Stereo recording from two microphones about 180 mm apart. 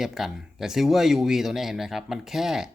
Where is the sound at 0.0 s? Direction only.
Centre (ahead or behind).